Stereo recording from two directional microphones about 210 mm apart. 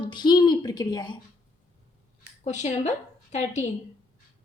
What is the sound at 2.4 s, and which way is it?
A woman's voice, 35° left (ahead or behind).